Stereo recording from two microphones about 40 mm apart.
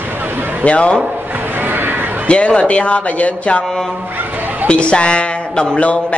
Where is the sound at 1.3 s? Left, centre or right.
Right.